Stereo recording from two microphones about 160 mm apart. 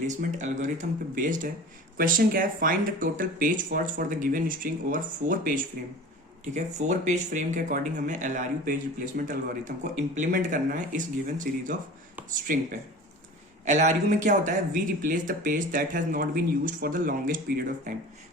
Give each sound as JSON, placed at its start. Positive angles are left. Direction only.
{"t": 0.1, "sound": "speech", "side_deg": -50}
{"t": 6.4, "sound": "speech", "side_deg": -45}
{"t": 13.7, "sound": "speech", "side_deg": -50}